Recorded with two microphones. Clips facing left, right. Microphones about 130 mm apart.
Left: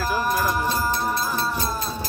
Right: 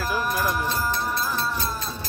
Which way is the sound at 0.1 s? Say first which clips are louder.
Left 3 dB; 35° left (ahead or behind).